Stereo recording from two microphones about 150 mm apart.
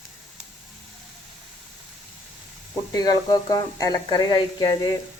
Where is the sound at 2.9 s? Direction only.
25° left (ahead or behind).